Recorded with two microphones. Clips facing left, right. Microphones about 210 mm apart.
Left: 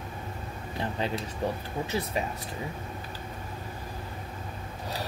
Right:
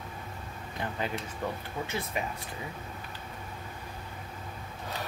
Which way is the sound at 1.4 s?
30° left (ahead or behind).